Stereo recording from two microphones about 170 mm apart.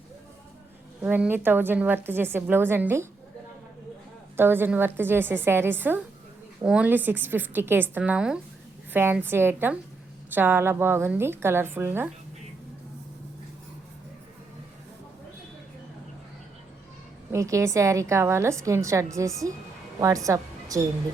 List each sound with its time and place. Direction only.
1.0 s a woman's voice: 10° right (ahead or behind)
4.4 s a woman's voice: 15° right (ahead or behind)
17.3 s a woman's voice: 20° right (ahead or behind)